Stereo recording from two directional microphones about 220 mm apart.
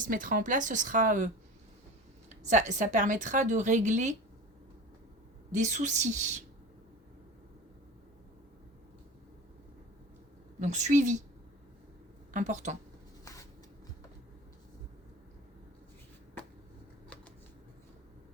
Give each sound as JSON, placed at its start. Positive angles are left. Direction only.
{"t": 0.0, "sound": "a woman's voice", "side_deg": -35}
{"t": 2.3, "sound": "a woman's voice", "side_deg": -35}
{"t": 5.5, "sound": "a woman's voice", "side_deg": -35}
{"t": 10.6, "sound": "a woman's voice", "side_deg": -35}
{"t": 12.3, "sound": "a woman's voice", "side_deg": -35}